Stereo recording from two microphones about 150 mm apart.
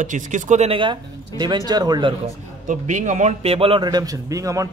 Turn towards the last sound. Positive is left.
turn(degrees=-20)  # may be behind; listen again after turning